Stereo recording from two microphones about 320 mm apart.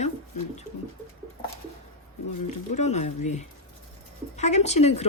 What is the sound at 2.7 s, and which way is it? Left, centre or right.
Speech, left.